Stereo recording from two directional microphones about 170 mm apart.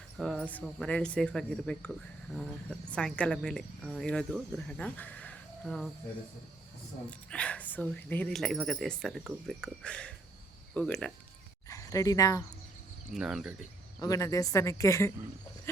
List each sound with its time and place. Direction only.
0.2 s speech: 5° left (ahead or behind)
7.1 s speech: 5° left (ahead or behind)
11.7 s speech: 20° left (ahead or behind)
13.1 s speech: 5° right (ahead or behind)
14.0 s speech: 20° left (ahead or behind)